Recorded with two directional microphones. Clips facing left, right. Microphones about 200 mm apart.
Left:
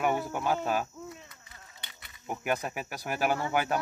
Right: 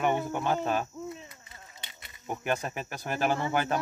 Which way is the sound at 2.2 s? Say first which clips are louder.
Even; 5° left (ahead or behind).